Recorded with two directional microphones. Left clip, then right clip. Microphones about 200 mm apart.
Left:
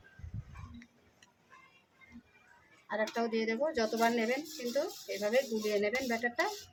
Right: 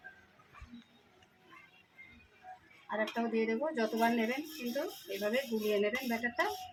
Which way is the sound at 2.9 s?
20° left (ahead or behind).